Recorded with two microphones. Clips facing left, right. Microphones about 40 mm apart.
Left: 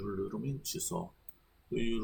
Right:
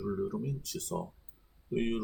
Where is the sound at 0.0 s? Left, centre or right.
Centre.